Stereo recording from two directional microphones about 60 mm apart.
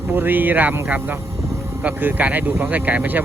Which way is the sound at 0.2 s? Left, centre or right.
Right.